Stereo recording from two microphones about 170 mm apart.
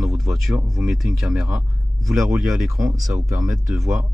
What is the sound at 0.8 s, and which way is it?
Speech, centre (ahead or behind).